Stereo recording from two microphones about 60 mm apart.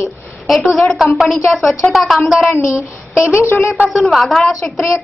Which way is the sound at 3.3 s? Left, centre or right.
Left.